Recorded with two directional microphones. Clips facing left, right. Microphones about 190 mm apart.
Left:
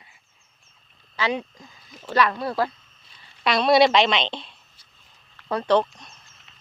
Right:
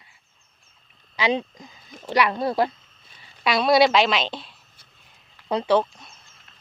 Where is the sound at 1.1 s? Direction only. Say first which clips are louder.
Right 3 dB; 20° right (ahead or behind).